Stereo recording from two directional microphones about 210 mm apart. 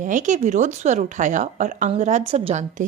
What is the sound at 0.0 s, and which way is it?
Speech, 35° right (ahead or behind).